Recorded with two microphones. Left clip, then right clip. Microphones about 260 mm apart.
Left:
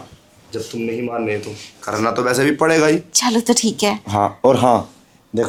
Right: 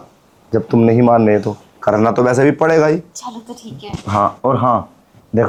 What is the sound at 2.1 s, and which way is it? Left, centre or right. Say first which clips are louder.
Speech: right 4 dB; right.